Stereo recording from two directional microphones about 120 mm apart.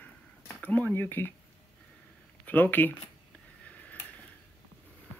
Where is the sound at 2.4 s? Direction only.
15° left (ahead or behind).